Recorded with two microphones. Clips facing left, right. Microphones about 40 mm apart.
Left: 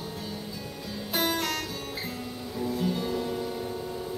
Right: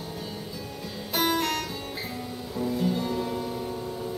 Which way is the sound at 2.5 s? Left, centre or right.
Centre.